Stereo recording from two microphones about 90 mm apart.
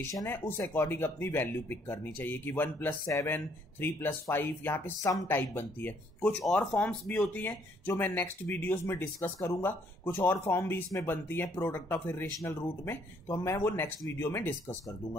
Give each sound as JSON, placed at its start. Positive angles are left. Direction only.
{"t": 0.0, "sound": "speech", "side_deg": 35}
{"t": 0.7, "sound": "speech", "side_deg": 25}
{"t": 6.4, "sound": "speech", "side_deg": 5}